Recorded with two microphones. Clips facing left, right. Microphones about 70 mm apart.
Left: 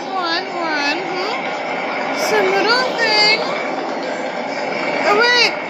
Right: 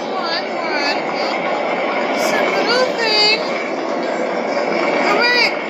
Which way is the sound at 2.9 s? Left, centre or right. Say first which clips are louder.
Left 1 dB; left.